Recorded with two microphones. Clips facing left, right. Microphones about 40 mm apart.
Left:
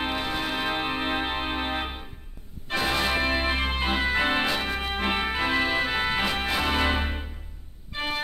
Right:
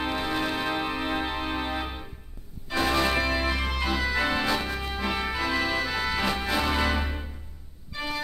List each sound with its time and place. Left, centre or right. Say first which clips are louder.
0.0 s music: even; left
3.1 s music: left 1 dB; left